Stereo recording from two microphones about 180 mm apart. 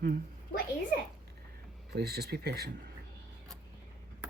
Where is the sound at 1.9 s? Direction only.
60° right (ahead or behind).